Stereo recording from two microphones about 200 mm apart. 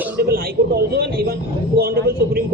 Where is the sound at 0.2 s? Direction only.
50° right (ahead or behind).